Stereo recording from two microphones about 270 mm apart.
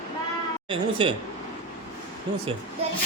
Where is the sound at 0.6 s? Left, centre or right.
Centre.